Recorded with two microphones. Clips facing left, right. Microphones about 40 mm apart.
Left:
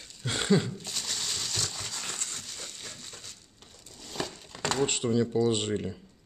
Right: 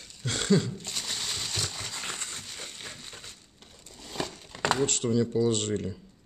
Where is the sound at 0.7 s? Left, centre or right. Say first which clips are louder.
Right 1 dB; centre.